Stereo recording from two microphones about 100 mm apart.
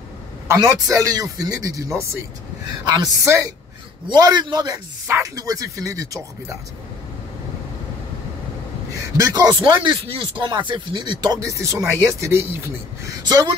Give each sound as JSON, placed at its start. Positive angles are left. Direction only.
{"t": 0.5, "sound": "a man's voice", "side_deg": -35}
{"t": 4.1, "sound": "speech", "side_deg": -45}
{"t": 5.0, "sound": "a man's voice", "side_deg": -30}
{"t": 9.1, "sound": "speech", "side_deg": -40}
{"t": 13.2, "sound": "speech", "side_deg": -40}